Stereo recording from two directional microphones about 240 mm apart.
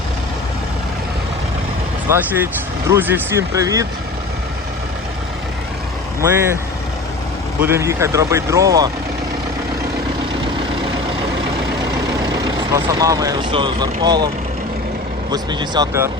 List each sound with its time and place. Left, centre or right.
2.1 s speech: centre
6.2 s speech: centre
7.6 s speech: centre
12.7 s speech: centre
15.3 s speech: centre